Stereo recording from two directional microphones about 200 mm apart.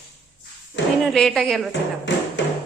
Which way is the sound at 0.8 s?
65° left (ahead or behind).